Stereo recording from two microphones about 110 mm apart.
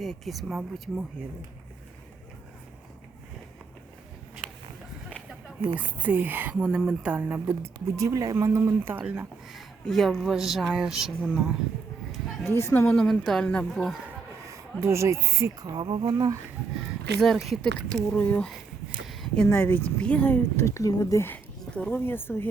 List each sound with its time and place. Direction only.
0.0 s speech: centre (ahead or behind)
5.7 s speech: 15° right (ahead or behind)
9.5 s speech: centre (ahead or behind)
12.5 s speech: 25° left (ahead or behind)
13.0 s speech: 5° left (ahead or behind)
14.4 s speech: 25° right (ahead or behind); by 16.1 s 45° right (ahead or behind)
16.1 s speech: 30° right (ahead or behind)
17.2 s speech: centre (ahead or behind)
17.9 s speech: 15° left (ahead or behind)
19.0 s a sound: centre (ahead or behind)
19.5 s speech: 20° left (ahead or behind)
20.7 s speech: 30° left (ahead or behind)
21.6 s speech: 10° left (ahead or behind)